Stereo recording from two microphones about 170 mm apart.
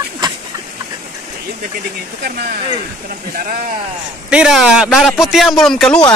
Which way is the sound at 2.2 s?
65° right (ahead or behind).